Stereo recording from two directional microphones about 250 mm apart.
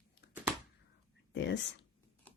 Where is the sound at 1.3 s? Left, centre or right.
Left.